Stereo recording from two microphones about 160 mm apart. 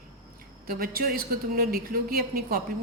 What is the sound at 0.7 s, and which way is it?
Speech, 70° right (ahead or behind).